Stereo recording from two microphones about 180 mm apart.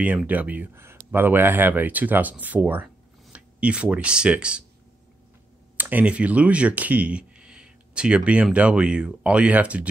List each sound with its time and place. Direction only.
0.0 s speech: 10° right (ahead or behind)
5.8 s speech: 10° right (ahead or behind)